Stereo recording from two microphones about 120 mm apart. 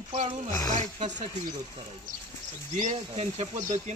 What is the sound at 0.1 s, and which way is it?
Speech, 70° right (ahead or behind).